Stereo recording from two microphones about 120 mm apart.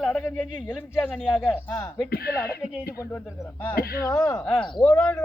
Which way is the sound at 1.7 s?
25° left (ahead or behind).